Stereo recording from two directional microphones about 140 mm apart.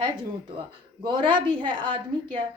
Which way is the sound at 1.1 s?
35° right (ahead or behind).